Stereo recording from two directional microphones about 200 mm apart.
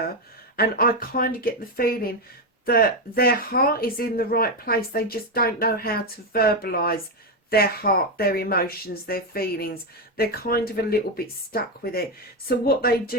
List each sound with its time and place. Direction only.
0.5 s speech: 50° left (ahead or behind)